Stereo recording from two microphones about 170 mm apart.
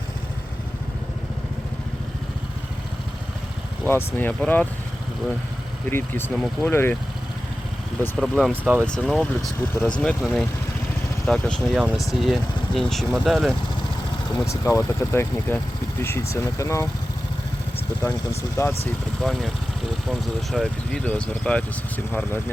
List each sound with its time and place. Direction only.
3.8 s speech: 10° left (ahead or behind)
5.9 s speech: 15° left (ahead or behind)
8.2 s speech: centre (ahead or behind)
14.4 s speech: 15° left (ahead or behind)
18.0 s speech: 15° left (ahead or behind)
19.2 s speech: centre (ahead or behind)